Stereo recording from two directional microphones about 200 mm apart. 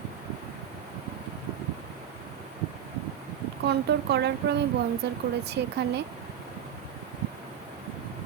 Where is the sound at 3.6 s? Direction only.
55° right (ahead or behind).